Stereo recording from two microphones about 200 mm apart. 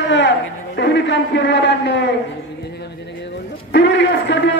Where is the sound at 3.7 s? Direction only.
60° left (ahead or behind).